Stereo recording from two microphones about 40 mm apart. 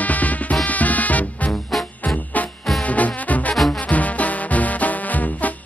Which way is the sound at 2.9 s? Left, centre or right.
Left.